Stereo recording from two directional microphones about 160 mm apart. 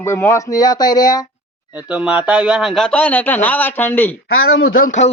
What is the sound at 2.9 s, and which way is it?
Speech, 10° left (ahead or behind).